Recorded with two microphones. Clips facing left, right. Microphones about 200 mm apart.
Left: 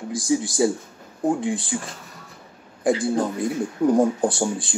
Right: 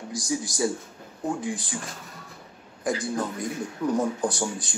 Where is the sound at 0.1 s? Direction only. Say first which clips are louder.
Left 7 dB; 30° left (ahead or behind).